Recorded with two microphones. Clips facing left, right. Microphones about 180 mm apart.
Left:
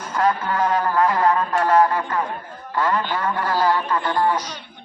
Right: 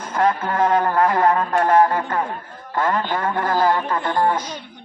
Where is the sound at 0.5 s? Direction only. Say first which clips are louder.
Right 2 dB; 50° right (ahead or behind).